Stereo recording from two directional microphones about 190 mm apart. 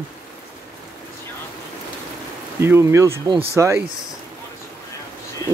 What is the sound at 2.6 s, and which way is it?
Speech, 15° right (ahead or behind).